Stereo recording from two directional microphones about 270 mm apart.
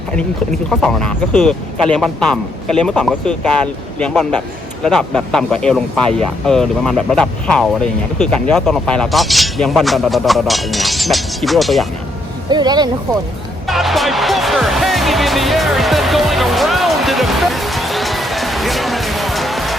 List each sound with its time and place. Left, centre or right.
0.7 s speech: centre
12.5 s speech: centre
13.7 s music: centre